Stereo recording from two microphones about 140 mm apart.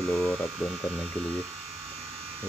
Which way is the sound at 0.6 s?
Centre (ahead or behind).